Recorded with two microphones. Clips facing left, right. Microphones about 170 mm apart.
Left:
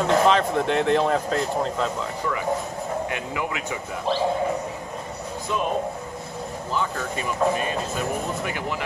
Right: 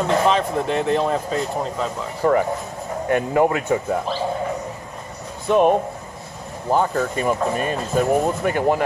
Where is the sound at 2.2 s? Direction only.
50° right (ahead or behind).